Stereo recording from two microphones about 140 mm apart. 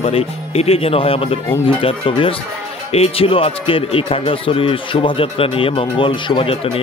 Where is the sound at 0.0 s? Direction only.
45° left (ahead or behind).